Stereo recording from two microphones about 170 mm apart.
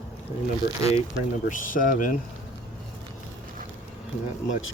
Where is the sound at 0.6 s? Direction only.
20° right (ahead or behind).